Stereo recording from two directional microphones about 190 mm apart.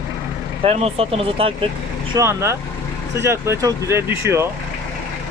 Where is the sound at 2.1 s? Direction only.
15° right (ahead or behind).